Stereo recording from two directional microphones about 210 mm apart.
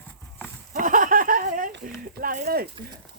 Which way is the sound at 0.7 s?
40° right (ahead or behind).